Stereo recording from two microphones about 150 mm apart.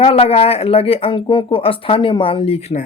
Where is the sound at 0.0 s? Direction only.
40° left (ahead or behind).